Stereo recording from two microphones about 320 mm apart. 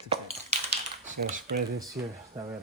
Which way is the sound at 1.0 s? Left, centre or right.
Right.